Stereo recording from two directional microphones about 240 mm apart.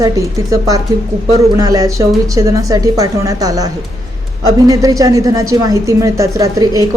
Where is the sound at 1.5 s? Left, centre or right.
Centre.